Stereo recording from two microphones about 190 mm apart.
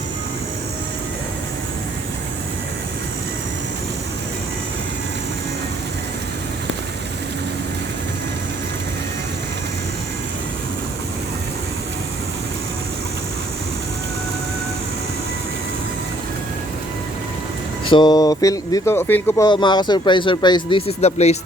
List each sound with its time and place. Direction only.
17.8 s speech: 25° left (ahead or behind)
19.5 s speech: 25° left (ahead or behind)